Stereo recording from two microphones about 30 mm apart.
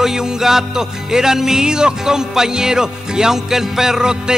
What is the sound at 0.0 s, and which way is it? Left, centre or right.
Music, centre.